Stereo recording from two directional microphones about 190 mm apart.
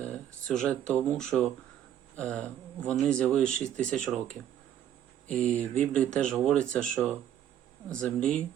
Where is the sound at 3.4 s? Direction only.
40° right (ahead or behind).